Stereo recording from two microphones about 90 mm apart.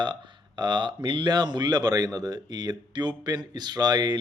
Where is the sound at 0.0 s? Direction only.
60° right (ahead or behind).